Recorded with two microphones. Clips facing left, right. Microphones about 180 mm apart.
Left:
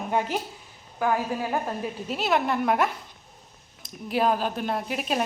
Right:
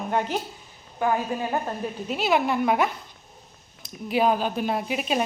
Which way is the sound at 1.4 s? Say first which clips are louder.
Right 1 dB; 5° left (ahead or behind).